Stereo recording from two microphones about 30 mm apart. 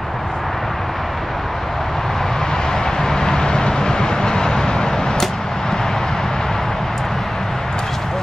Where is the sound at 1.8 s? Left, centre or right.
Centre.